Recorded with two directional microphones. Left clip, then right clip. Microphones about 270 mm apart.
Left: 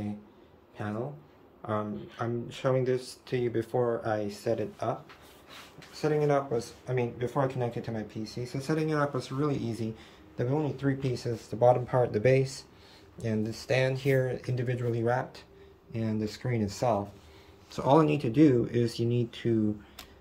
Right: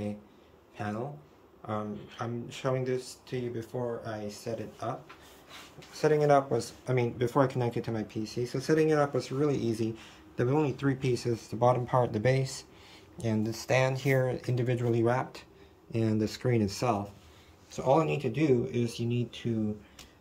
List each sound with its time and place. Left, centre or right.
0.7 s speech: centre
5.9 s speech: centre
17.6 s speech: centre